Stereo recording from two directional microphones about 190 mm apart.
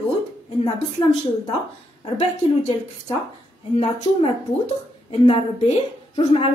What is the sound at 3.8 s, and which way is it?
A woman's voice, 30° left (ahead or behind).